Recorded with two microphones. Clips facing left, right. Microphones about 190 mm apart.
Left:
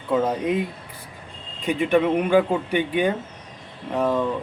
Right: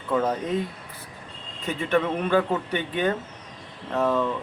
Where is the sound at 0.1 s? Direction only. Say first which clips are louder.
Left 3 dB; 10° left (ahead or behind).